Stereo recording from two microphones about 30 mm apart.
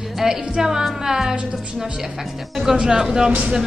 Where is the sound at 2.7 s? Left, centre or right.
Right.